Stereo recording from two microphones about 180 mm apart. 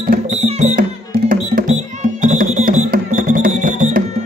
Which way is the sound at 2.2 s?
45° right (ahead or behind).